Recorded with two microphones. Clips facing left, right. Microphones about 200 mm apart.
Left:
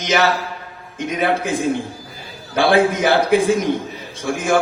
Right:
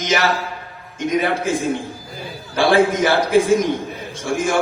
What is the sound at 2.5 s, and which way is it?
Speech, 55° left (ahead or behind).